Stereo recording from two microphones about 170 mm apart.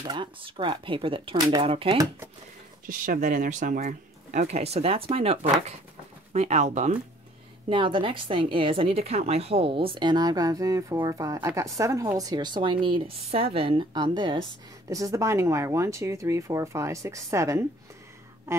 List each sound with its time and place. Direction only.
0.0 s a woman's voice: 25° right (ahead or behind)
2.9 s speech: 50° right (ahead or behind)
7.7 s a woman's voice: 30° right (ahead or behind); by 18.6 s 15° right (ahead or behind)